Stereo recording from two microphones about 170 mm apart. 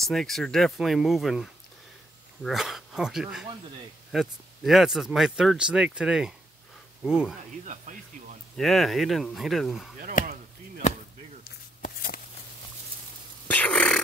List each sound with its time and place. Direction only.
0.1 s speech: centre (ahead or behind)
7.6 s speech: 45° right (ahead or behind)
8.5 s speech: centre (ahead or behind)
10.8 s chop: 40° left (ahead or behind)
11.4 s a sound: 60° left (ahead or behind)
13.5 s a sound: 5° left (ahead or behind)